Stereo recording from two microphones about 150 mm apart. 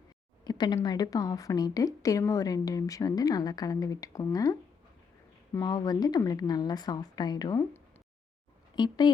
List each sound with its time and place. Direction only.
0.4 s a woman's voice: 25° left (ahead or behind)
5.5 s a woman's voice: 25° left (ahead or behind)
8.7 s speech: 30° left (ahead or behind)